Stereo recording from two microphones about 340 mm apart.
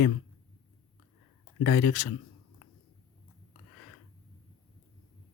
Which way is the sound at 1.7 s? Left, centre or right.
Left.